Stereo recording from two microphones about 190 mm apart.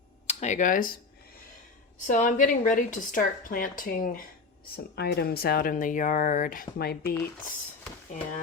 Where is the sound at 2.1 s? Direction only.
40° left (ahead or behind).